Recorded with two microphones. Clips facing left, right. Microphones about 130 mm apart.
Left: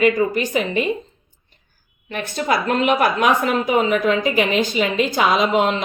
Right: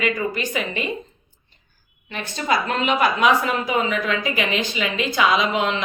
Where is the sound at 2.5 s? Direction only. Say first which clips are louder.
Left 3 dB; 50° left (ahead or behind).